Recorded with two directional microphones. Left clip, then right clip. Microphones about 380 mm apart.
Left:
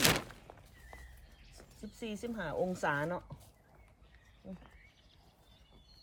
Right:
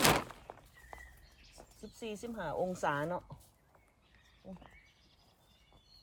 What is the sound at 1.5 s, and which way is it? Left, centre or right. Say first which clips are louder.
Speech: left 1 dB; centre.